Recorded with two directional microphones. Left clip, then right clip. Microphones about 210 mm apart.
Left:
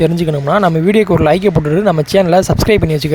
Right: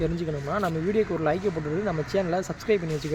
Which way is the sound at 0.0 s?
50° left (ahead or behind).